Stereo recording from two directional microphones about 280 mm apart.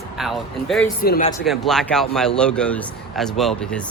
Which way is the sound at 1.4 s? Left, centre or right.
Centre.